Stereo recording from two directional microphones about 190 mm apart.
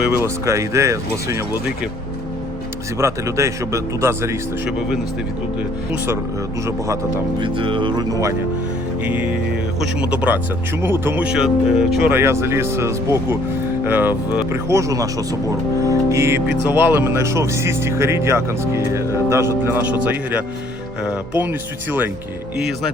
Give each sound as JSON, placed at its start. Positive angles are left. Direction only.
{"t": 0.2, "sound": "speech", "side_deg": -15}
{"t": 3.0, "sound": "speech", "side_deg": -15}
{"t": 6.7, "sound": "speech", "side_deg": -15}
{"t": 9.0, "sound": "speech", "side_deg": -10}